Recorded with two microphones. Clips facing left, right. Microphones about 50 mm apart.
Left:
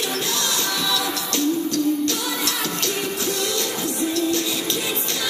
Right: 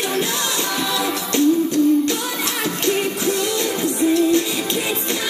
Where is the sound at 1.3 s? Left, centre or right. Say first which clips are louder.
Right 6 dB; right.